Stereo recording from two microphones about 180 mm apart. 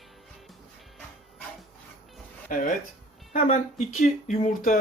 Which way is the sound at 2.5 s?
50° left (ahead or behind).